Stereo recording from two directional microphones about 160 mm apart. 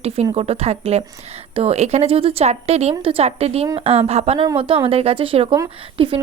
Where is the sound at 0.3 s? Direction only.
40° right (ahead or behind).